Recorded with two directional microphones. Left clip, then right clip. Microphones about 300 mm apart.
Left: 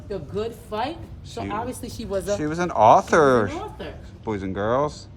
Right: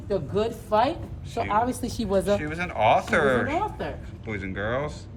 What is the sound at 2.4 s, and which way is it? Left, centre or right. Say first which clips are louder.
Speech: left 6 dB; centre.